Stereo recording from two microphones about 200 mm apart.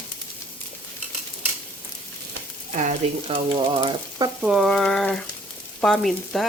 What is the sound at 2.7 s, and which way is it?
Frying, 35° right (ahead or behind).